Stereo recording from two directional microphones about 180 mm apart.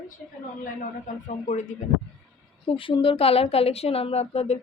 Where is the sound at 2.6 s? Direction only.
30° left (ahead or behind).